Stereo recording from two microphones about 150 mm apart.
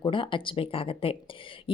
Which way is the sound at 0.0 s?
35° left (ahead or behind).